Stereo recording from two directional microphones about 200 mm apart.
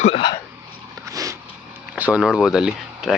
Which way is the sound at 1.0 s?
15° right (ahead or behind).